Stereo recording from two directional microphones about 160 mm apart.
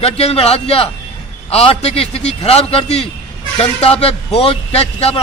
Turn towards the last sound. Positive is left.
turn(degrees=40)  # may be behind; listen again after turning